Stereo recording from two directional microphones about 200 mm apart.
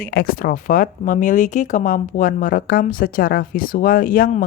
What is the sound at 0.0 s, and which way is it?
Speech, 50° left (ahead or behind).